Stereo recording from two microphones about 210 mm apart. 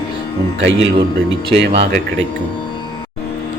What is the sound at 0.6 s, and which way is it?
Speech, 60° right (ahead or behind).